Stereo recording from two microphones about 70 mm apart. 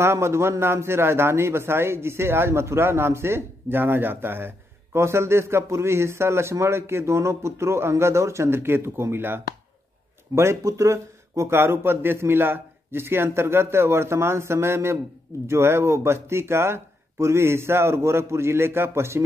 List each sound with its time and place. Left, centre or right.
0.0 s a man's voice: right